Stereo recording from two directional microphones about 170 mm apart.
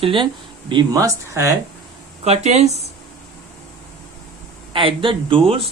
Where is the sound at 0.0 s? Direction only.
30° right (ahead or behind).